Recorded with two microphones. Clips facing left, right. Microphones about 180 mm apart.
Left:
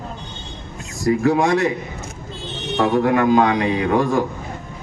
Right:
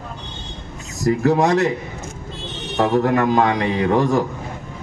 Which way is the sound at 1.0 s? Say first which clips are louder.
Even; 40° right (ahead or behind).